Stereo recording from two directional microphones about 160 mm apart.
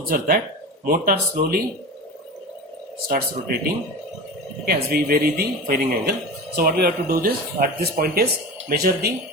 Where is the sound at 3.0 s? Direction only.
70° right (ahead or behind).